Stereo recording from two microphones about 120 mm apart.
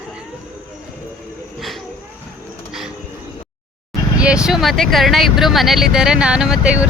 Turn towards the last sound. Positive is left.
turn(degrees=-5)  # may be behind; listen again after turning